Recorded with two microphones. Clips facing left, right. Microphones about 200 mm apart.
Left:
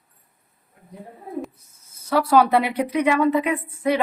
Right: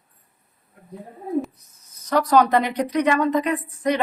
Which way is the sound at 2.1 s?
5° left (ahead or behind).